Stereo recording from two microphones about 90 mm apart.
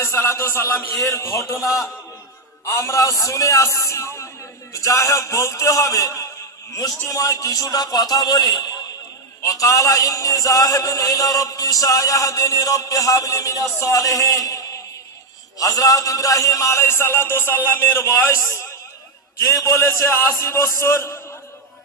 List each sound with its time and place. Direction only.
0.0 s a man's voice: 30° left (ahead or behind)